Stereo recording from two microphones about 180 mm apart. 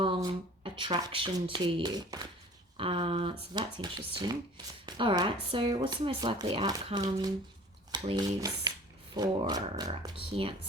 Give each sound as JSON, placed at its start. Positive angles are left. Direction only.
{"t": 0.0, "sound": "speech", "side_deg": -25}